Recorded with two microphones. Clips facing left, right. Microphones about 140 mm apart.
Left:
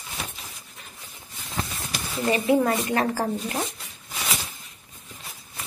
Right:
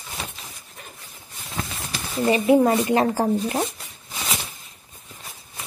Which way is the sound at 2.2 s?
20° right (ahead or behind).